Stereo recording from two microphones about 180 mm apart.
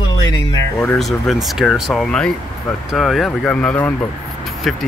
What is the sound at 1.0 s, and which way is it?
Speech, centre (ahead or behind).